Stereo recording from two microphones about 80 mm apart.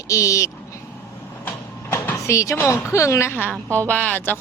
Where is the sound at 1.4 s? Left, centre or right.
Left.